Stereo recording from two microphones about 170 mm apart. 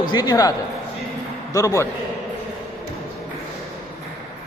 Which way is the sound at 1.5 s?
20° left (ahead or behind).